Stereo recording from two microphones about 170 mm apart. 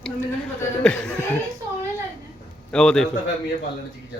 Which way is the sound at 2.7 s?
5° left (ahead or behind).